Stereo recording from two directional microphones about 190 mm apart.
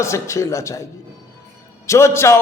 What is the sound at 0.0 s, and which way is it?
Speech, 15° left (ahead or behind).